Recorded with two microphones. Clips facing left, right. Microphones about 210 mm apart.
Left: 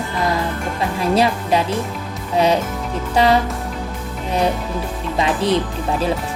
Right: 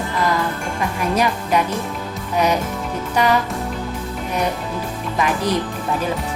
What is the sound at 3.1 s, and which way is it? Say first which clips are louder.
Music: left 3 dB; 30° left (ahead or behind).